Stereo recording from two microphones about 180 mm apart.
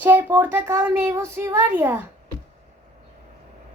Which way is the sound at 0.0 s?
10° right (ahead or behind).